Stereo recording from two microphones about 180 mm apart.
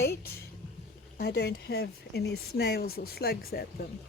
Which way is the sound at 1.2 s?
65° left (ahead or behind).